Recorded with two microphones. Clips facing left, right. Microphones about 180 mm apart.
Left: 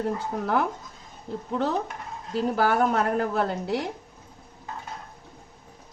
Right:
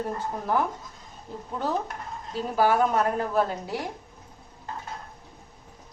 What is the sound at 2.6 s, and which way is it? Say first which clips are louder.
A woman's voice: right 2 dB; 60° left (ahead or behind).